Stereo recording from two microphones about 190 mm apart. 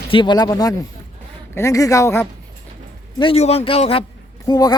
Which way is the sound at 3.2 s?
30° left (ahead or behind).